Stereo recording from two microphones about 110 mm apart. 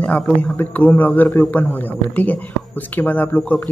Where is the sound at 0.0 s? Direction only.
10° left (ahead or behind).